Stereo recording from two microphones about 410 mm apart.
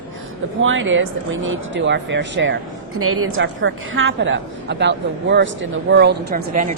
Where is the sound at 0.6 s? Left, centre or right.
Right.